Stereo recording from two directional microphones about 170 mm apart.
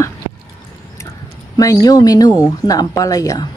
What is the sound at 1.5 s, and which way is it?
A woman's voice, 20° left (ahead or behind).